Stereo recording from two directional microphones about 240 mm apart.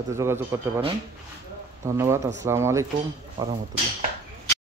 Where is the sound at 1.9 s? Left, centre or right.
Centre.